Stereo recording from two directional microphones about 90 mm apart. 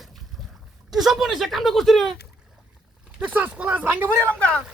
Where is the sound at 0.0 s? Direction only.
Centre (ahead or behind).